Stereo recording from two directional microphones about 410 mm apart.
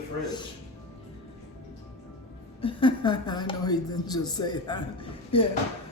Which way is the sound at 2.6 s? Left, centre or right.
Centre.